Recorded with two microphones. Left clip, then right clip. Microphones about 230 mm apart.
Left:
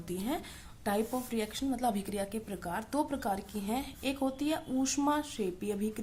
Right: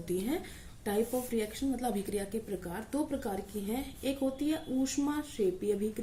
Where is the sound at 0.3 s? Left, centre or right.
Left.